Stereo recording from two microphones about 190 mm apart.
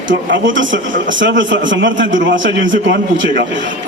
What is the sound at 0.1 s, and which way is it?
A man's voice, 80° right.